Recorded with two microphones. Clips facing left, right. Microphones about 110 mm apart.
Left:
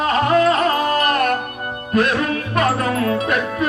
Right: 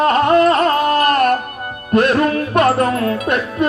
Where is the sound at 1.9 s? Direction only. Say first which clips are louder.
Right 4 dB; 55° right (ahead or behind).